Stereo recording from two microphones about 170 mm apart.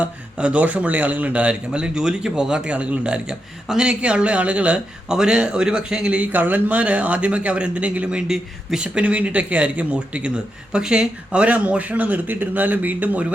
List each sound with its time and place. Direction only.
0.0 s a man's voice: 5° right (ahead or behind)